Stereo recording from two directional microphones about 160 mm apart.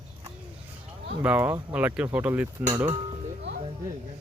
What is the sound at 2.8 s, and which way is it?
Speech, 35° right (ahead or behind).